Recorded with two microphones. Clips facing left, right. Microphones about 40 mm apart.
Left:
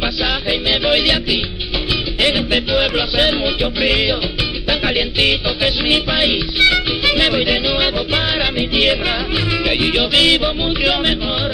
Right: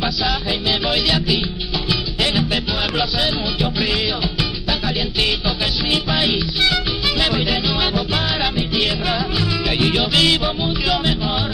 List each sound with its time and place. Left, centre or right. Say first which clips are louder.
0.0 s music: left 2 dB; left
2.2 s music: left 4 dB; left